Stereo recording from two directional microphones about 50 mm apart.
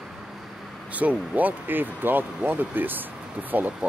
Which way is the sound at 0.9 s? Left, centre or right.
Right.